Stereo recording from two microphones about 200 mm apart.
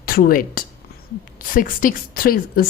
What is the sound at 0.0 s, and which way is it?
Speech, 45° left (ahead or behind).